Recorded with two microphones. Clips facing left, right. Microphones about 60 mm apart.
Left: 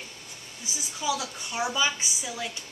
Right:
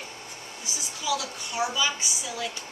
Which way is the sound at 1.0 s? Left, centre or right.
Left.